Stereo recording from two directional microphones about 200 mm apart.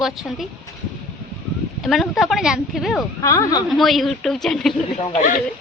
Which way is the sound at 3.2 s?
15° left (ahead or behind).